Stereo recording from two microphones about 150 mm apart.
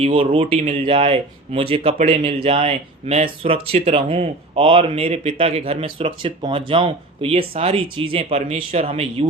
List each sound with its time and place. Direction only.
0.0 s speech: 35° right (ahead or behind)